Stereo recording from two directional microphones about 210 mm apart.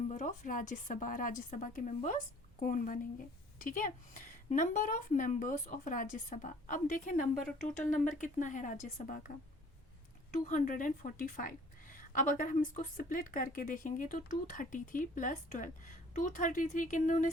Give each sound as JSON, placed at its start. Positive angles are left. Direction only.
{"t": 0.1, "sound": "a woman's voice", "side_deg": 35}
{"t": 10.3, "sound": "a woman's voice", "side_deg": 40}